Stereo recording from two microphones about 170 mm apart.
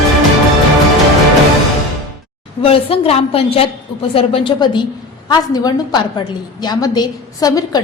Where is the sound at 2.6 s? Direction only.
35° left (ahead or behind).